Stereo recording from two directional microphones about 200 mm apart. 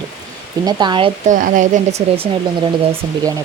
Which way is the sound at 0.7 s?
20° right (ahead or behind).